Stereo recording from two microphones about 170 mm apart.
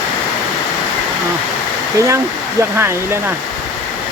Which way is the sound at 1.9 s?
20° right (ahead or behind).